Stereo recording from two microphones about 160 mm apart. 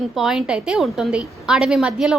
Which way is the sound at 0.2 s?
5° right (ahead or behind).